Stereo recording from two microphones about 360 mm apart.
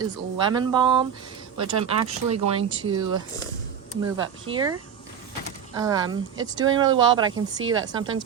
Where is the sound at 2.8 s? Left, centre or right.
Centre.